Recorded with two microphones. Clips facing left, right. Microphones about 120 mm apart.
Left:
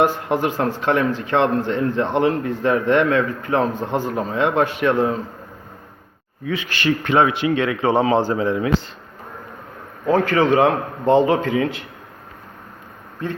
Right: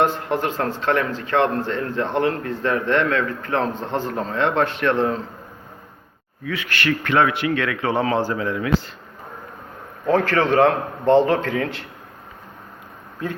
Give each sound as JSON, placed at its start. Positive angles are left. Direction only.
{"t": 0.0, "sound": "a man's voice", "side_deg": 10}
{"t": 6.4, "sound": "a man's voice", "side_deg": 20}
{"t": 10.1, "sound": "a man's voice", "side_deg": 5}